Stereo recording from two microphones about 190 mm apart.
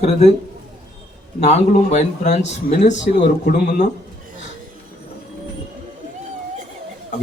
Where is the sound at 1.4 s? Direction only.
35° left (ahead or behind).